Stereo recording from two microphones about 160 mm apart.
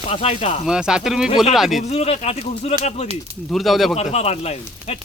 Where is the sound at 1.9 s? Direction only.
40° left (ahead or behind).